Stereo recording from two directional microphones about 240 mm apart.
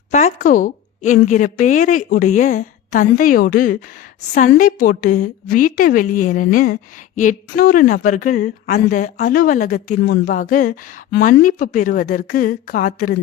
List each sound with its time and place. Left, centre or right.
0.1 s speech: left